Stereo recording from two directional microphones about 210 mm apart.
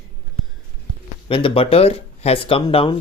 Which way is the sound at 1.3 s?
25° left (ahead or behind).